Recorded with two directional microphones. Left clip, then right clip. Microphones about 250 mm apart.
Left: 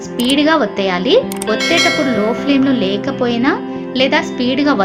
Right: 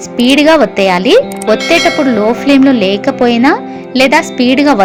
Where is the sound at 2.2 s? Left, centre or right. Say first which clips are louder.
Right 6 dB; right.